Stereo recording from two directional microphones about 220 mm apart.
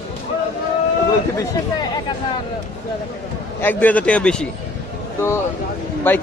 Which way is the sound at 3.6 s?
10° left (ahead or behind).